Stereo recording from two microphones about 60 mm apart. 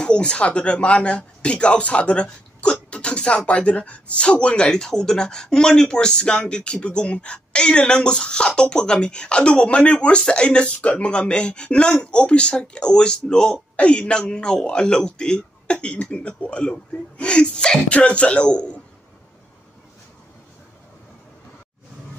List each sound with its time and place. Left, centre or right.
0.0 s speech: centre